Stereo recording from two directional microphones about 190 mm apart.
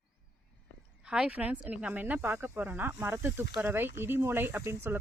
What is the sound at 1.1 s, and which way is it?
Speech, 5° right (ahead or behind).